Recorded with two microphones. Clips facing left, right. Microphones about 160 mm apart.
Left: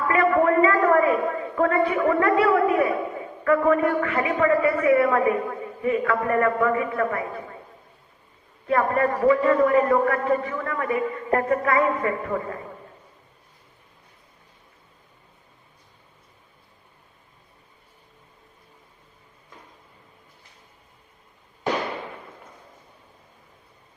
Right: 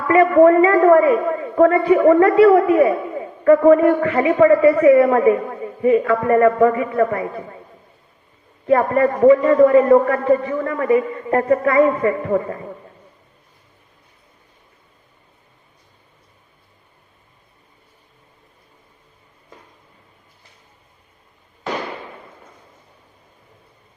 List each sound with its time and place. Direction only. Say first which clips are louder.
0.1 s a man's voice: right 9 dB; 30° right (ahead or behind)
8.6 s a man's voice: right 6 dB; 30° right (ahead or behind)